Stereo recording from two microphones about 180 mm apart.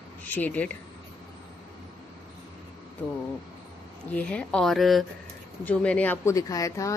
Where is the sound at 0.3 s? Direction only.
10° left (ahead or behind).